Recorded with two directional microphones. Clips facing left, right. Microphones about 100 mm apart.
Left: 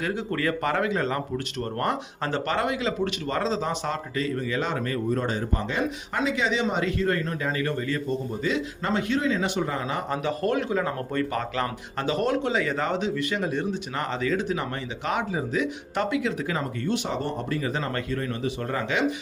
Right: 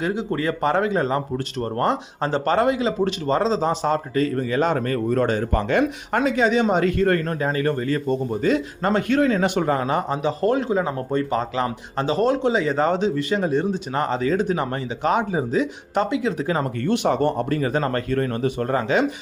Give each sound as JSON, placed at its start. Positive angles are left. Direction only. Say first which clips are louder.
{"t": 0.0, "sound": "speech", "louder": "right 4 dB", "side_deg": -20}
{"t": 5.1, "sound": "speech", "louder": "right 6 dB", "side_deg": -65}
{"t": 10.1, "sound": "speech", "louder": "right 5 dB", "side_deg": -25}
{"t": 16.8, "sound": "speech", "louder": "right 10 dB", "side_deg": -60}